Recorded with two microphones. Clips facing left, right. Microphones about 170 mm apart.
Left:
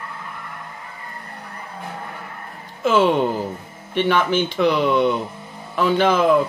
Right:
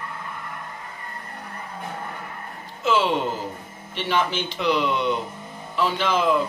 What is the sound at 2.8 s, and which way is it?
Speech, 55° left (ahead or behind).